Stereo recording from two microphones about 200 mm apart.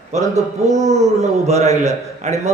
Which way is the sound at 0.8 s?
35° right (ahead or behind).